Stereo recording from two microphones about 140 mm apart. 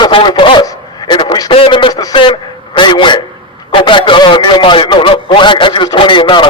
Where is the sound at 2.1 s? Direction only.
35° left (ahead or behind).